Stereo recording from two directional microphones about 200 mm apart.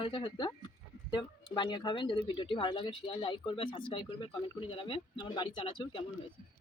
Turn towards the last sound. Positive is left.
turn(degrees=25)  # may be behind; listen again after turning